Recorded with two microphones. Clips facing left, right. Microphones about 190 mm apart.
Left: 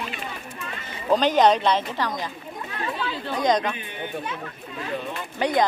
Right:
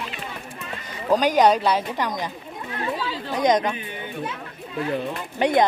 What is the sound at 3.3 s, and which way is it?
Speech, 20° right (ahead or behind).